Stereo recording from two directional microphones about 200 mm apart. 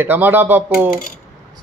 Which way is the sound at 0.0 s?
10° right (ahead or behind).